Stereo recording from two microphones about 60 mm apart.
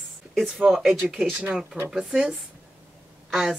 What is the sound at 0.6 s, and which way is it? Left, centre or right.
Speech, right.